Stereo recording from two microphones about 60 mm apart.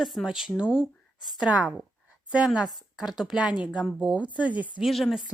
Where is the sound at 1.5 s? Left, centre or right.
Right.